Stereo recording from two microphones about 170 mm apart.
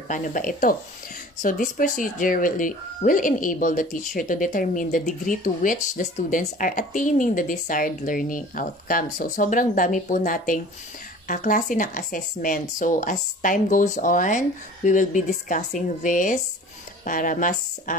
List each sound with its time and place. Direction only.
0.1 s speech: 50° left (ahead or behind)